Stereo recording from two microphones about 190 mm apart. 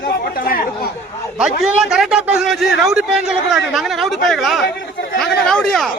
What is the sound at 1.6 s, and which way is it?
A man's voice, 5° right (ahead or behind).